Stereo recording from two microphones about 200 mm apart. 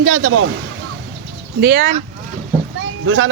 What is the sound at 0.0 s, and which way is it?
Speech, 90° right.